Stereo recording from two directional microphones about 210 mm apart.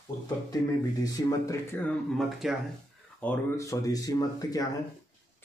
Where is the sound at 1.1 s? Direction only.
15° left (ahead or behind); by 2.5 s centre (ahead or behind).